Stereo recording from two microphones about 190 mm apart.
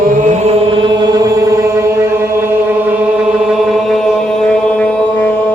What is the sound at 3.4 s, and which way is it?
Chant, centre (ahead or behind).